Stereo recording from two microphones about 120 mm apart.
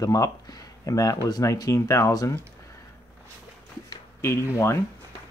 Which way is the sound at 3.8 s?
25° left (ahead or behind).